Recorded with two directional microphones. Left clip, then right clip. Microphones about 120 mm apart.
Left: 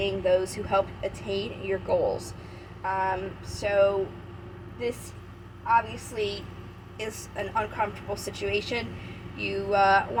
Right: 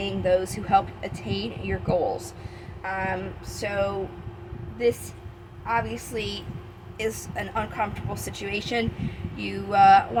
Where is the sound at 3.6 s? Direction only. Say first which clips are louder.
Left 4 dB; 60° right (ahead or behind).